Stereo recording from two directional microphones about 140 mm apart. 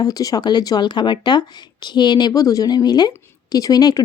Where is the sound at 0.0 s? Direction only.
25° left (ahead or behind).